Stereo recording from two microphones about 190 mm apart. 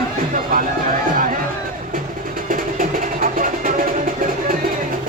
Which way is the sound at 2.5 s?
45° right (ahead or behind).